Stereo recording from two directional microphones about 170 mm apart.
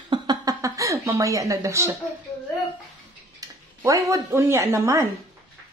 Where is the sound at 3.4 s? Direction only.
20° right (ahead or behind).